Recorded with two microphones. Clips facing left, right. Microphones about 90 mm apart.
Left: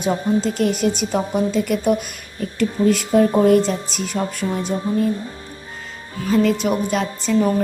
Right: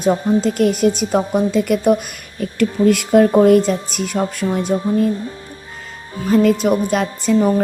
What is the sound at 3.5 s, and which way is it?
Speech, 50° right (ahead or behind).